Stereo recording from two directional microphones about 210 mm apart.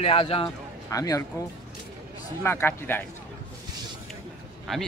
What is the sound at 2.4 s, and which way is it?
Speech, 10° left (ahead or behind).